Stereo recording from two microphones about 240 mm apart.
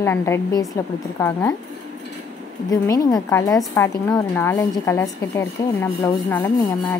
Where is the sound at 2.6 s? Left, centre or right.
Centre.